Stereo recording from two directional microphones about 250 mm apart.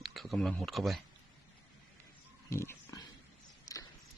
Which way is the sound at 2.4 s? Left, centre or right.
Centre.